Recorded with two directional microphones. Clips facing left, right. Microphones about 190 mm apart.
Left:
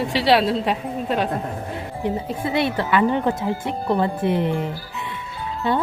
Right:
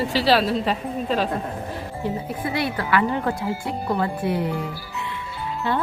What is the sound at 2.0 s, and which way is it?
Speech, 25° left (ahead or behind).